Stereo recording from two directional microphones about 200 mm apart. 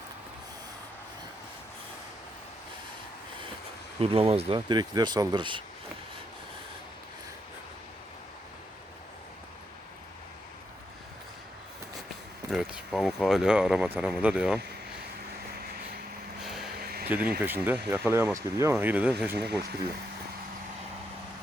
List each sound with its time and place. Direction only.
4.0 s speech: 30° right (ahead or behind)
12.5 s speech: centre (ahead or behind)
16.4 s vehicle: centre (ahead or behind)
16.7 s a sound: 50° right (ahead or behind)
17.1 s speech: 10° right (ahead or behind)
19.4 s speech: 55° right (ahead or behind)